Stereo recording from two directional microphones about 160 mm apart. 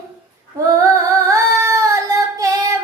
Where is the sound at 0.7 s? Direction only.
20° right (ahead or behind).